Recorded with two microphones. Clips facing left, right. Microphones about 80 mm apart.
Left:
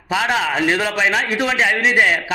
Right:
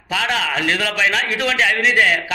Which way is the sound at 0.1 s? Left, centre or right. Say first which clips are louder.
Left 2 dB; centre.